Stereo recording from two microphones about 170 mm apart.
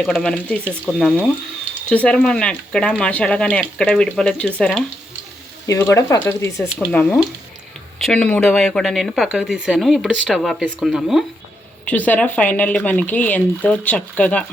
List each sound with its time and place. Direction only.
0.0 s speech: 5° left (ahead or behind)
5.6 s speech: 20° left (ahead or behind)
6.7 s speech: 5° right (ahead or behind)
6.9 s speech: 10° left (ahead or behind)